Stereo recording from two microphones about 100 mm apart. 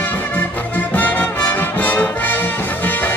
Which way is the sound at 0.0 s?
15° left (ahead or behind).